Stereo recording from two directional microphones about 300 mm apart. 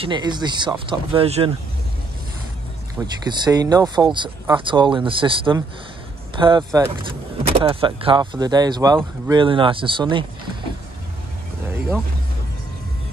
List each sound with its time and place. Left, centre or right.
0.0 s speech: centre
3.3 s speech: centre